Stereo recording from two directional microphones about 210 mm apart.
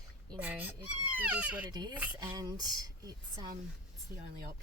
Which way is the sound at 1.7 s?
20° right (ahead or behind).